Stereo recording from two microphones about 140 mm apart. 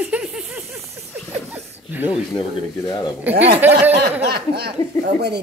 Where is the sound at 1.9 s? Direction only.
10° right (ahead or behind).